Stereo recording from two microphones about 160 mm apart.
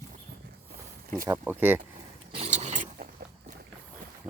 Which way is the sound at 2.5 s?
50° right (ahead or behind).